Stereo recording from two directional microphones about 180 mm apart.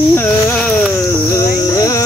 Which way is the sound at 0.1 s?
10° left (ahead or behind).